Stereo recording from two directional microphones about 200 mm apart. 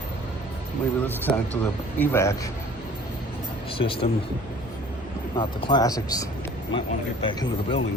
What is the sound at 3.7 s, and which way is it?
Speech, 25° left (ahead or behind).